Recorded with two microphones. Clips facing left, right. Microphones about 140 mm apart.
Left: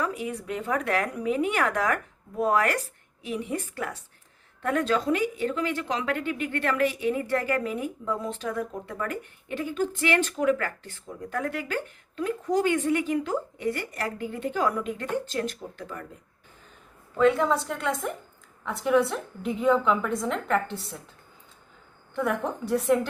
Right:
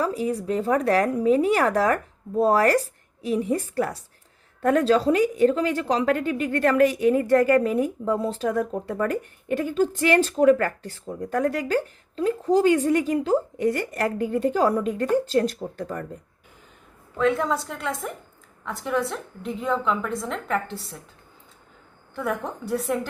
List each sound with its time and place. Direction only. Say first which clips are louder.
0.0 s a woman's voice: right 6 dB; 35° right (ahead or behind)
17.2 s a woman's voice: left 1 dB; centre (ahead or behind)
22.1 s a woman's voice: left 1 dB; centre (ahead or behind)